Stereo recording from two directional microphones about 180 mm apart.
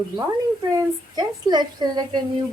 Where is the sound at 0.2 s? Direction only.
20° right (ahead or behind).